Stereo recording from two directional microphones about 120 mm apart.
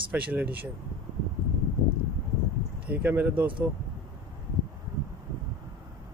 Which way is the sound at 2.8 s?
15° right (ahead or behind).